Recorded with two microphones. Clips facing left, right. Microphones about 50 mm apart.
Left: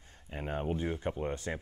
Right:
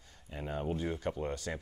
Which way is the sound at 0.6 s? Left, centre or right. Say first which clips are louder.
Even; centre.